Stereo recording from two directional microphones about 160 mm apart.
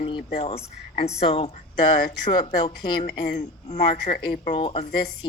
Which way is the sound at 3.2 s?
50° left (ahead or behind).